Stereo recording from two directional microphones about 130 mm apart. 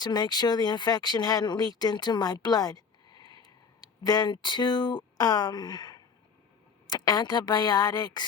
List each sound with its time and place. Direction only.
0.0 s a woman's voice: 30° left (ahead or behind)